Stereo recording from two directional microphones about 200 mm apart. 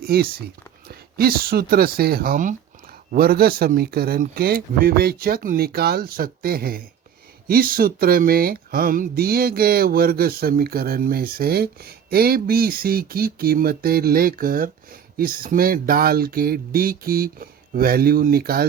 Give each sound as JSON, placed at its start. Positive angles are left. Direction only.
{"t": 0.0, "sound": "speech", "side_deg": -50}